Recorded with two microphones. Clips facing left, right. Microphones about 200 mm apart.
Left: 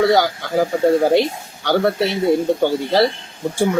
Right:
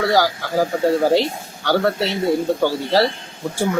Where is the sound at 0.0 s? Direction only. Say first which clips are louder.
Left 3 dB; 20° left (ahead or behind).